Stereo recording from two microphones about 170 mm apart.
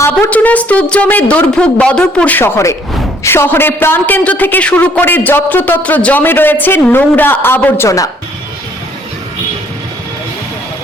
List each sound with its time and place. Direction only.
0.0 s a woman's voice: 10° left (ahead or behind)